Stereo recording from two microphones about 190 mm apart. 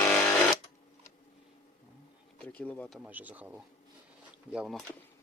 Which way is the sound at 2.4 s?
10° left (ahead or behind).